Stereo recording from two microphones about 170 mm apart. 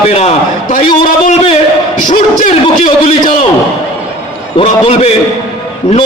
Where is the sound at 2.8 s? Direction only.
30° left (ahead or behind).